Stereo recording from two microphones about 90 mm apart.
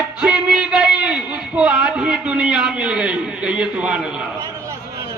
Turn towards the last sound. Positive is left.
turn(degrees=-10)  # may be behind; listen again after turning